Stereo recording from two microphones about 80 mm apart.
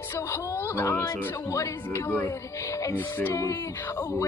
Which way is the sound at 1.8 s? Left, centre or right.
Left.